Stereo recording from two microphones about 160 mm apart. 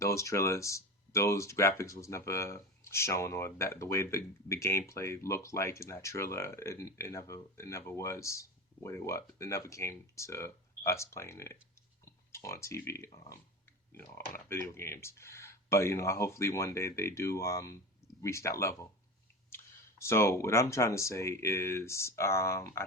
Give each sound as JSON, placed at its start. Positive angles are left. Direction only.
{"t": 0.0, "sound": "speech", "side_deg": 20}
{"t": 14.3, "sound": "speech", "side_deg": 15}